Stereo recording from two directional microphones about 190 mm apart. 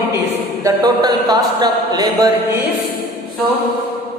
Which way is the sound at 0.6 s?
20° right (ahead or behind).